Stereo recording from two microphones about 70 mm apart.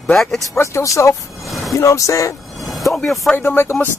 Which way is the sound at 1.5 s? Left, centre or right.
Centre.